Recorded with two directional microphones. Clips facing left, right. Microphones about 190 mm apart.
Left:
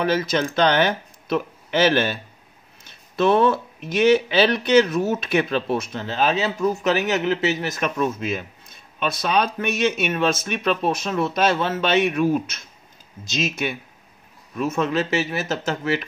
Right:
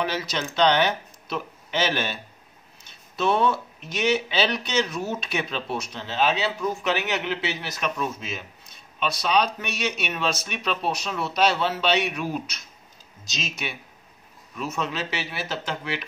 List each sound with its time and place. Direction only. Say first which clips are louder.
0.0 s a man's voice: left 7 dB; 50° left (ahead or behind)
3.2 s speech: left 5 dB; 55° left (ahead or behind)